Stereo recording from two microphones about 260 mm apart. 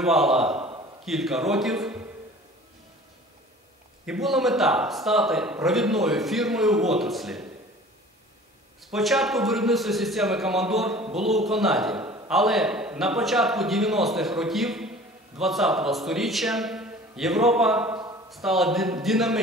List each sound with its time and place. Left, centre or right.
0.0 s a man's voice: centre
0.6 s a sound: right
1.0 s speech: centre
4.0 s speech: centre
8.9 s speech: centre